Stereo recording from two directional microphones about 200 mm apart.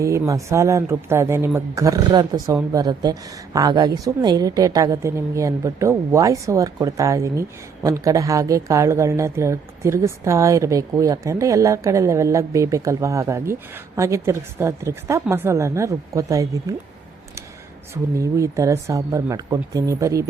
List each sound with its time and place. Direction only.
0.0 s a woman's voice: 15° right (ahead or behind)
17.9 s a woman's voice: 15° right (ahead or behind)